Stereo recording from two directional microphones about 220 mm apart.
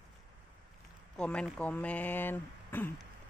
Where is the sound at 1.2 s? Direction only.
5° left (ahead or behind).